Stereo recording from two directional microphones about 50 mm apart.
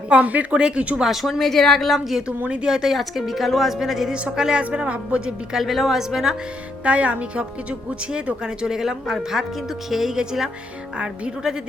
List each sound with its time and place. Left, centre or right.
0.1 s speech: right
1.0 s a woman's voice: centre
2.2 s speech: right
2.7 s a woman's voice: centre; by 5.5 s right
5.5 s a woman's voice: centre
6.8 s speech: right